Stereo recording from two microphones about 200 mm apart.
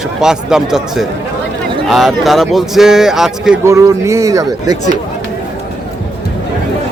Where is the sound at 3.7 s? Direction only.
15° right (ahead or behind).